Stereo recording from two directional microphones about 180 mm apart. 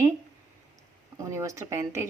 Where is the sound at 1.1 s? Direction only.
15° right (ahead or behind).